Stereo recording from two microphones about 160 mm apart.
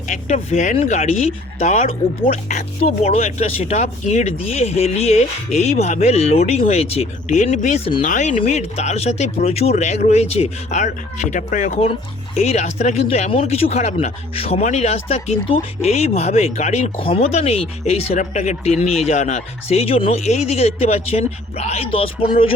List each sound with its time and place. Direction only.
0.1 s speech: 50° left (ahead or behind)